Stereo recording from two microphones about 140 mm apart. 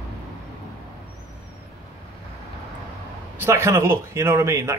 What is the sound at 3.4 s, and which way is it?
Speech, 20° right (ahead or behind).